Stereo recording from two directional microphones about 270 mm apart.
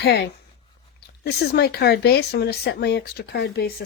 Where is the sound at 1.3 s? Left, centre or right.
Left.